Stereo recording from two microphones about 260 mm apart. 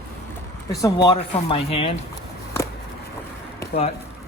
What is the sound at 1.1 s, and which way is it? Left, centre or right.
Speech, left.